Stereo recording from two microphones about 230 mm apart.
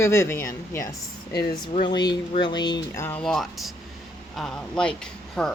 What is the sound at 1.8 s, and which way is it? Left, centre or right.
Speech, centre.